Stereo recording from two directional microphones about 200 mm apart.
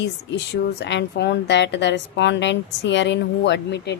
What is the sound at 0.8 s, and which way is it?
A woman's voice, 60° left (ahead or behind).